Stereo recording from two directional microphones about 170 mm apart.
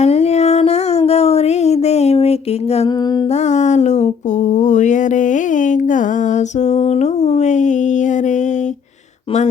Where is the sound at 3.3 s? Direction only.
40° left (ahead or behind).